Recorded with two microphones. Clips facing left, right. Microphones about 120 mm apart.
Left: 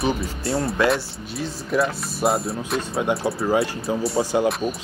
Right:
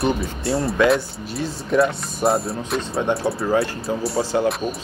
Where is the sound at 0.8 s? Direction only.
Centre (ahead or behind).